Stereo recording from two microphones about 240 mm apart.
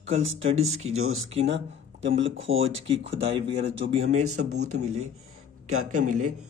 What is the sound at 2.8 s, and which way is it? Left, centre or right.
Speech, right.